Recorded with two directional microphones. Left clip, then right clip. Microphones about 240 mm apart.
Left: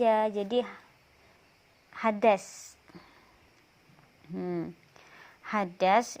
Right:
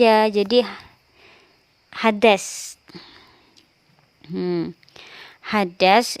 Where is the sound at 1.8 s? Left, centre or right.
Right.